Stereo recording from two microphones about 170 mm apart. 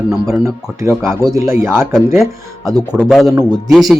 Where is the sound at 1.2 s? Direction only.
20° right (ahead or behind).